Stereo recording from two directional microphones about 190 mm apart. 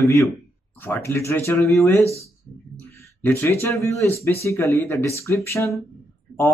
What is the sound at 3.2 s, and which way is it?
Speech, 10° left (ahead or behind).